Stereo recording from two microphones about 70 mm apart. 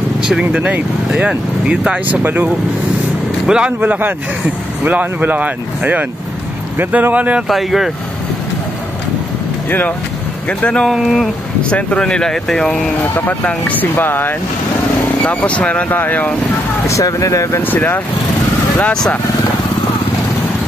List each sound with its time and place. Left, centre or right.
0.2 s speech: centre
3.4 s speech: centre
3.8 s speech: right
7.4 s speech: centre
9.7 s speech: left
10.6 s speech: centre
10.9 s speech: centre
11.7 s speech: centre
12.9 s speech: left
15.2 s speech: centre
16.8 s speech: left
17.6 s speech: left